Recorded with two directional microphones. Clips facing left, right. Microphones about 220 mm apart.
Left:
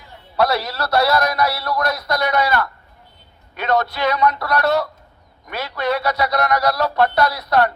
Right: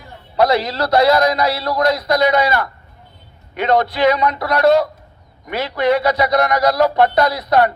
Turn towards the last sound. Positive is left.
turn(degrees=-15)  # may be behind; listen again after turning